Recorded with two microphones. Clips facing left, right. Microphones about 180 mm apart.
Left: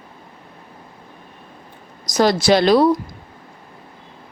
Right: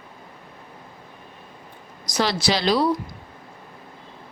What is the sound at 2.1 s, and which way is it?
Speech, 45° left (ahead or behind).